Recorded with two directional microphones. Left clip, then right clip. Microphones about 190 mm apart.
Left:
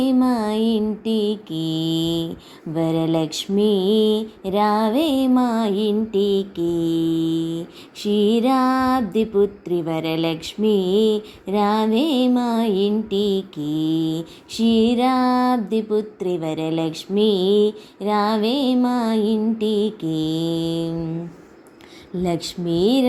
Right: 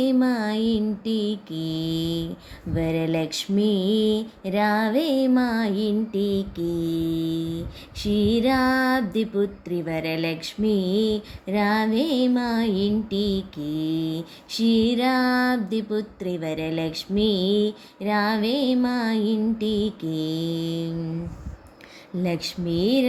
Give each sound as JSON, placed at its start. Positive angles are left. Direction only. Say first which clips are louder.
{"t": 0.0, "sound": "music", "louder": "left 3 dB", "side_deg": 5}
{"t": 6.1, "sound": "mantra", "louder": "left 6 dB", "side_deg": -25}
{"t": 7.9, "sound": "music", "louder": "left 4 dB", "side_deg": 5}
{"t": 22.2, "sound": "speech", "louder": "left 4 dB", "side_deg": 10}